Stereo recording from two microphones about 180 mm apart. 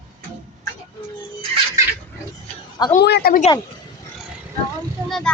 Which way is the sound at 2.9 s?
60° left (ahead or behind).